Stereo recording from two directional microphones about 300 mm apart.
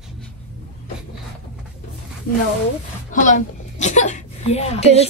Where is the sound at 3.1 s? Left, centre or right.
Left.